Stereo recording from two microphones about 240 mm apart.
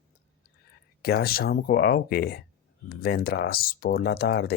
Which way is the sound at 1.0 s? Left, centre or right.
Left.